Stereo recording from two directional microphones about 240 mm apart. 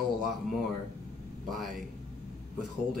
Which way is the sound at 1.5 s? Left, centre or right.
Centre.